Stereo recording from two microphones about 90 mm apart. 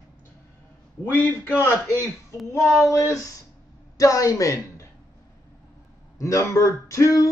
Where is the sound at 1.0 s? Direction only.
25° left (ahead or behind).